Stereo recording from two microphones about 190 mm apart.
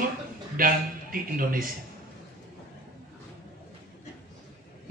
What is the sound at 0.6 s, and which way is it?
A man's voice, 50° right (ahead or behind).